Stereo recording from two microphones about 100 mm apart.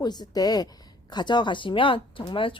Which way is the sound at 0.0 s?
45° left (ahead or behind).